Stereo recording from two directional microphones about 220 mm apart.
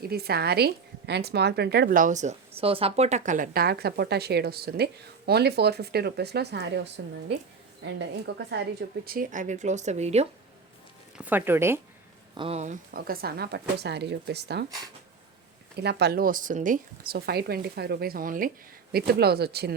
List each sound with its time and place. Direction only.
0.0 s speech: 45° right (ahead or behind)
9.0 s speech: 40° right (ahead or behind)
11.2 s speech: 10° right (ahead or behind)
12.3 s speech: 25° right (ahead or behind); by 14.7 s 50° right (ahead or behind)
15.8 s speech: 50° right (ahead or behind)